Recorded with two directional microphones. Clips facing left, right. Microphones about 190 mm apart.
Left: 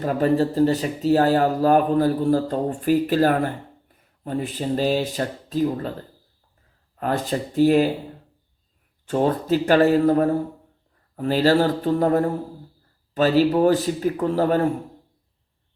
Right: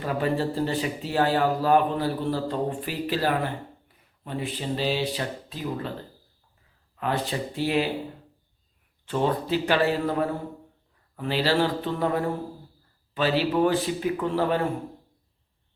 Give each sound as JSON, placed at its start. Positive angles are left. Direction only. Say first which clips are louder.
{"t": 0.0, "sound": "speech", "louder": "left 6 dB", "side_deg": 40}
{"t": 6.9, "sound": "speech", "louder": "left 4 dB", "side_deg": 45}
{"t": 9.0, "sound": "speech", "louder": "left 5 dB", "side_deg": 45}